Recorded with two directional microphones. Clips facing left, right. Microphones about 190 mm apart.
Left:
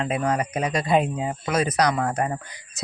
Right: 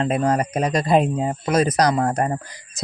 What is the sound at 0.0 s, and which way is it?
Speech, 40° right (ahead or behind).